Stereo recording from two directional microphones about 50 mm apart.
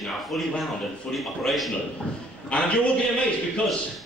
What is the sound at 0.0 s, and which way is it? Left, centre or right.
A man's voice, centre.